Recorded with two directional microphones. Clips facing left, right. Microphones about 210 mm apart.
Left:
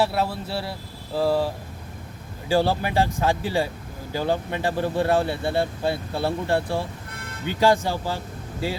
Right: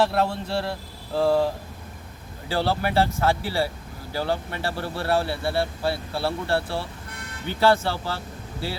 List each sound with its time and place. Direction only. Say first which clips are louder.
0.0 s speech: right 1 dB; 5° left (ahead or behind)
2.5 s speech: left 3 dB; 15° left (ahead or behind)